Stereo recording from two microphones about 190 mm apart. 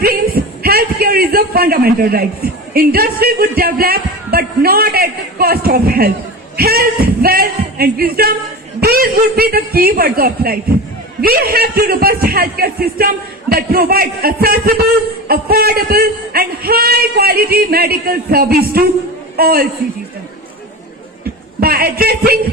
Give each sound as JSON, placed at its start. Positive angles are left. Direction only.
{"t": 0.0, "sound": "a sound", "side_deg": -55}
{"t": 2.7, "sound": "a man's voice", "side_deg": -50}
{"t": 21.6, "sound": "a man's voice", "side_deg": -50}